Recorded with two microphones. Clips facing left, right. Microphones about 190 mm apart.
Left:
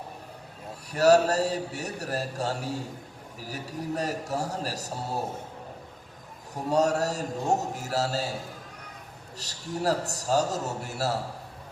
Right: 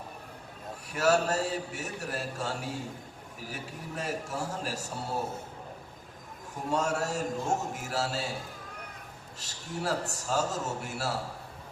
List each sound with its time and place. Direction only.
0.9 s a man's voice: 40° left (ahead or behind)
6.5 s a man's voice: 40° left (ahead or behind)
9.4 s a man's voice: 40° left (ahead or behind)